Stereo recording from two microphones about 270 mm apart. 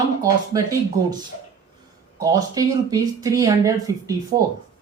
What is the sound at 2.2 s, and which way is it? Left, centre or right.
Speech, centre.